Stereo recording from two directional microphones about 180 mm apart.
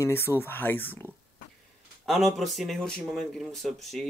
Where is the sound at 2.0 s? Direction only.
Centre (ahead or behind).